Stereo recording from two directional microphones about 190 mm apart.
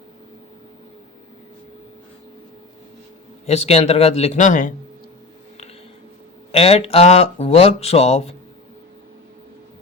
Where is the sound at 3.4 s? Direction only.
35° left (ahead or behind).